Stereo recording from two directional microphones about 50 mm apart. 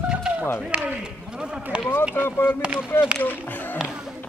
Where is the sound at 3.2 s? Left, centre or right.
Left.